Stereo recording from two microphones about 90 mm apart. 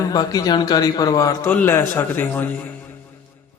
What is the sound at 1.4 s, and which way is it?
A man's voice, 25° left (ahead or behind).